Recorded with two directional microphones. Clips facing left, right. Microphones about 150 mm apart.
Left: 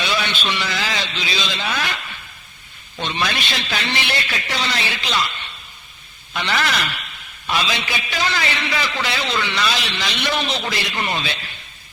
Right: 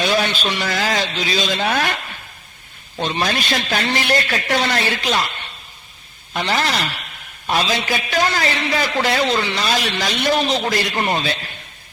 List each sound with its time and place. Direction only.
0.0 s a man's voice: 40° right (ahead or behind)